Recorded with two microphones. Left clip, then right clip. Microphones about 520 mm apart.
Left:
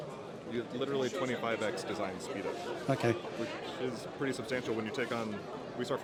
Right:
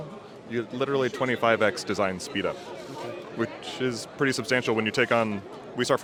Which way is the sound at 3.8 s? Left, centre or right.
Right.